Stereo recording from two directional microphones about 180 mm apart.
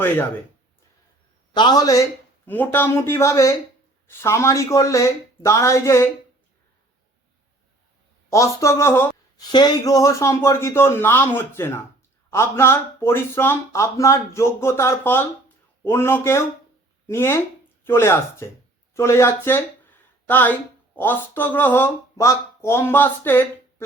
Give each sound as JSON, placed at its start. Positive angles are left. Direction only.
{"t": 1.5, "sound": "speech", "side_deg": 25}
{"t": 8.3, "sound": "speech", "side_deg": 15}